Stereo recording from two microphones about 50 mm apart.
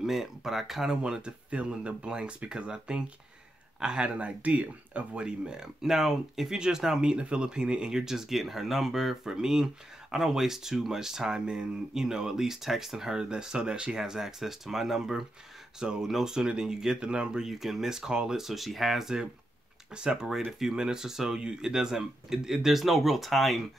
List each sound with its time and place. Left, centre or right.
0.0 s speech: centre
1.0 s speech: centre
17.5 s speech: centre
19.9 s speech: centre